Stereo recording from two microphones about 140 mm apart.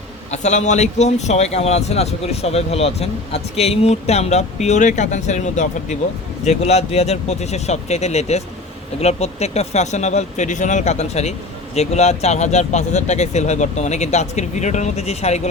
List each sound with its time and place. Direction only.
0.3 s speech: 55° left (ahead or behind)